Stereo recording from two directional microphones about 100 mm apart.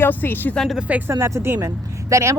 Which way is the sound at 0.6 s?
Centre (ahead or behind).